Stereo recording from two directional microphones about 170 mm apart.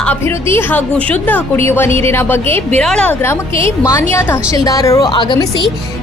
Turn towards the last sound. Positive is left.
turn(degrees=25)  # may be behind; listen again after turning